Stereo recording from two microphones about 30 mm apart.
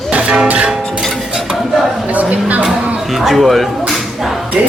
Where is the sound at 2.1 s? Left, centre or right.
Right.